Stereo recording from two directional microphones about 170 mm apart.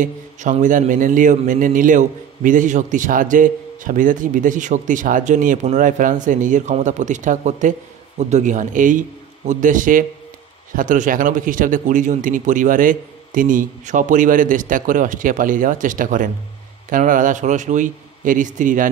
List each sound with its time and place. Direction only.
0.0 s a man's voice: 45° right (ahead or behind)